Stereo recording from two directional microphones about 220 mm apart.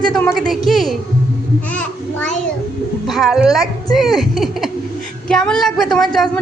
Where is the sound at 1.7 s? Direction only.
5° left (ahead or behind).